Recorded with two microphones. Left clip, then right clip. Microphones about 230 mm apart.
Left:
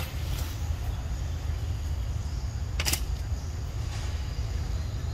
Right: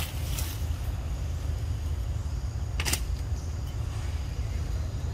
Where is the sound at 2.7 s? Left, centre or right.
Left.